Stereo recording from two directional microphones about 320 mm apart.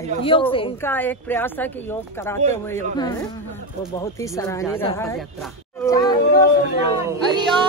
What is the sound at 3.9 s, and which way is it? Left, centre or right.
Speech, centre.